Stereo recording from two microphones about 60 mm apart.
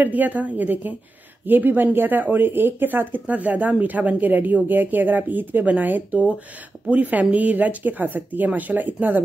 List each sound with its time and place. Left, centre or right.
0.0 s speech: right